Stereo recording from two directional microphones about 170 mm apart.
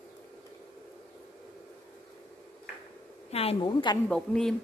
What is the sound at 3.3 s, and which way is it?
Speech, 30° left (ahead or behind).